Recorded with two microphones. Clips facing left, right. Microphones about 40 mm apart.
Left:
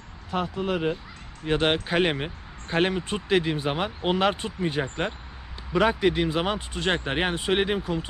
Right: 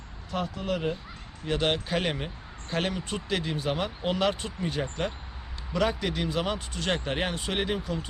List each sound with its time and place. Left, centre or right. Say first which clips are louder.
0.3 s speech: left 3 dB; left